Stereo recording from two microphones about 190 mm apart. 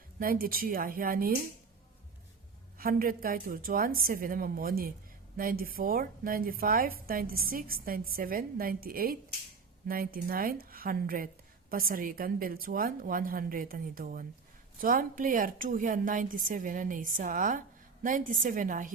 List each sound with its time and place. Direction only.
0.2 s a woman's voice: 50° right (ahead or behind)
2.7 s a woman's voice: 50° right (ahead or behind)